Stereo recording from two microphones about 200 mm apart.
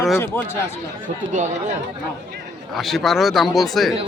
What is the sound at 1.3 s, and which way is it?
Speech, 35° right (ahead or behind).